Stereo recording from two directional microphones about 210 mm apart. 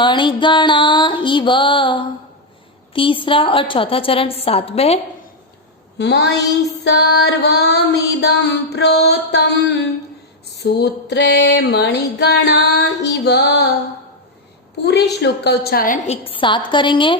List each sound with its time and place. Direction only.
0.0 s a woman's voice: 20° left (ahead or behind)
6.0 s female singing: 55° left (ahead or behind)
14.8 s female singing: 55° left (ahead or behind)
16.0 s a woman's voice: 25° left (ahead or behind)